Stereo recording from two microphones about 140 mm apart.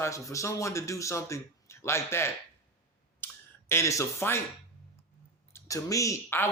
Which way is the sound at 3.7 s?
20° left (ahead or behind).